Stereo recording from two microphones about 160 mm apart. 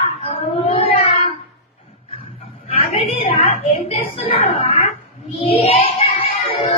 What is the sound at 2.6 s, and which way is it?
A woman's voice, 40° left (ahead or behind).